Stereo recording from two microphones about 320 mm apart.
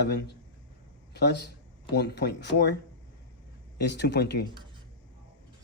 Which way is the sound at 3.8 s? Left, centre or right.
Left.